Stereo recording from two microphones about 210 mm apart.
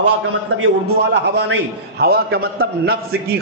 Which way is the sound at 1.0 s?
55° right (ahead or behind).